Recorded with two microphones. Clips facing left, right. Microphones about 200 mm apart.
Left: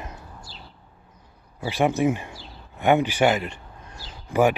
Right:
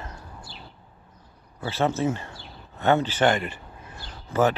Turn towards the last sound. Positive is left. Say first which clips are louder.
# left 2 dB
turn(degrees=15)  # may be behind; listen again after turning